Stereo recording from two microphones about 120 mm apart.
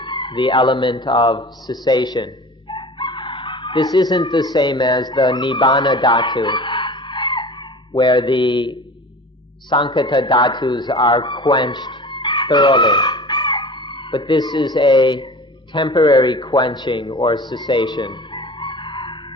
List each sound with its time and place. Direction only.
0.0 s speech: 40° left (ahead or behind)
2.7 s chicken: 55° left (ahead or behind)
3.8 s a man's voice: 35° left (ahead or behind)